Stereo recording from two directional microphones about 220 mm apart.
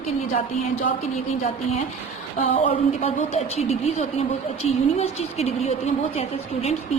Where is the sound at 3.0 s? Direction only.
30° left (ahead or behind).